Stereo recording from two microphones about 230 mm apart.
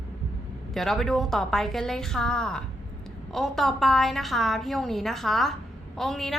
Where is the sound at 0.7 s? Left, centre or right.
Centre.